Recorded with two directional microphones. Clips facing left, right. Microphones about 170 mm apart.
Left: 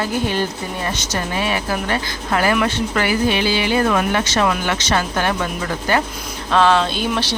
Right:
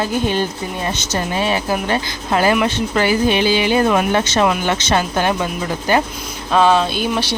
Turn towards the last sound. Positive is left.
turn(degrees=-10)  # may be behind; listen again after turning